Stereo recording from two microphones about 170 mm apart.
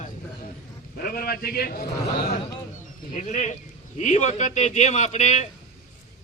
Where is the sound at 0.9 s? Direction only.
60° left (ahead or behind).